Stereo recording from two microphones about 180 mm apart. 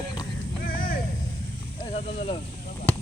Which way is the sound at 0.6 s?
50° left (ahead or behind).